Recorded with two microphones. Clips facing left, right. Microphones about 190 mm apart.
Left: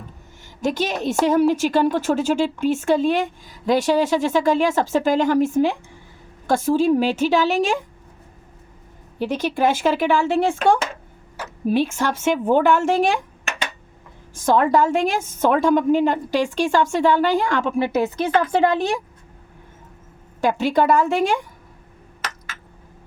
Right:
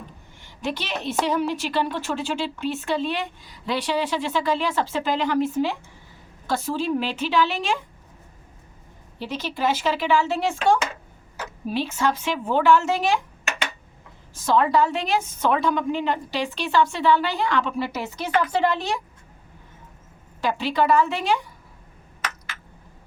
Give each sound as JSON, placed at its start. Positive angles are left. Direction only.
{"t": 0.6, "sound": "a woman's voice", "side_deg": 45}
{"t": 9.1, "sound": "a woman's voice", "side_deg": 50}
{"t": 14.3, "sound": "a woman's voice", "side_deg": 50}
{"t": 20.4, "sound": "a woman's voice", "side_deg": 45}